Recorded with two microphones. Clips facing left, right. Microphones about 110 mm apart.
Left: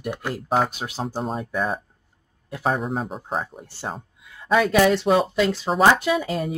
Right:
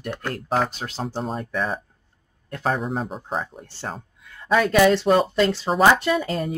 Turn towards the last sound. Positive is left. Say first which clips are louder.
# even
turn(degrees=0)  # may be behind; listen again after turning